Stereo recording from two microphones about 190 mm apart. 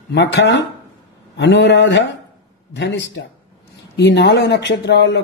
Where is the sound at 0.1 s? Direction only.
65° left (ahead or behind).